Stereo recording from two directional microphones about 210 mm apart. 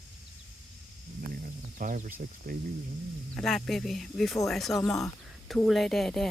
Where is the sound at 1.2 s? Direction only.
40° right (ahead or behind).